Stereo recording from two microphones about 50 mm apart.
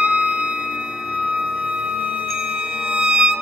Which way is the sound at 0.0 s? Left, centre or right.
Centre.